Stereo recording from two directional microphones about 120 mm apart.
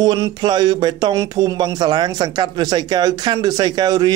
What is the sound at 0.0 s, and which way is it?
Speech, 35° right (ahead or behind).